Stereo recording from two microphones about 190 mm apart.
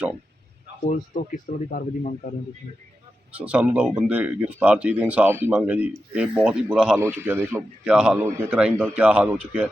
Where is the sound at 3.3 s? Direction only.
5° right (ahead or behind).